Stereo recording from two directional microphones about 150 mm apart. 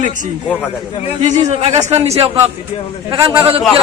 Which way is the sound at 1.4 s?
45° right (ahead or behind).